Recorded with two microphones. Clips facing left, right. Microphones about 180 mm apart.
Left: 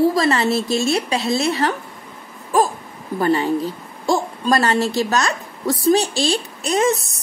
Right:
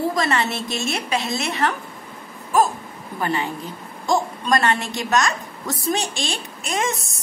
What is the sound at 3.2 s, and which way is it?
A woman's voice, 40° left (ahead or behind).